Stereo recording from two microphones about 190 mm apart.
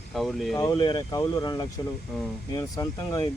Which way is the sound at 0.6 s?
20° left (ahead or behind).